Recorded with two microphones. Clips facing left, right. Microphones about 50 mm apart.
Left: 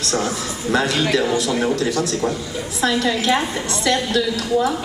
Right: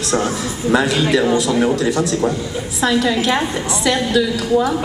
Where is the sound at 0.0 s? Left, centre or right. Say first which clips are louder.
Right 3 dB; centre.